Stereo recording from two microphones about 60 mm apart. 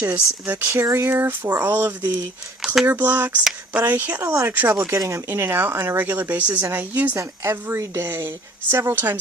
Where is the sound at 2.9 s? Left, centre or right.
Right.